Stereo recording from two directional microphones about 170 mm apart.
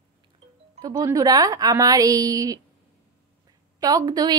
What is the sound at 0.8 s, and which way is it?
A woman's voice, 20° right (ahead or behind).